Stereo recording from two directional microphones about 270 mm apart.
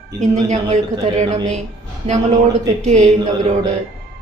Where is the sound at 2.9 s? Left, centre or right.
Right.